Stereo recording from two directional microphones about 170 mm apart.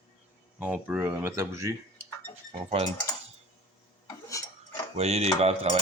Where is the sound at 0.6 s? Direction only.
10° right (ahead or behind).